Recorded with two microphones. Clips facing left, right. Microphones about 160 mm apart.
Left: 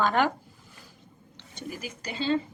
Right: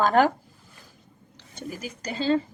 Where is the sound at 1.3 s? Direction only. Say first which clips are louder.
Right 2 dB; 40° right (ahead or behind).